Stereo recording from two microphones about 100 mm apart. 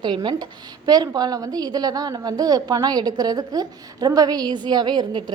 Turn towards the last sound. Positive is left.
turn(degrees=-50)  # may be behind; listen again after turning